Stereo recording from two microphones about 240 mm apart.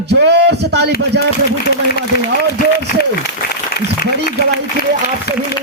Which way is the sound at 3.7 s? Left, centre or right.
Left.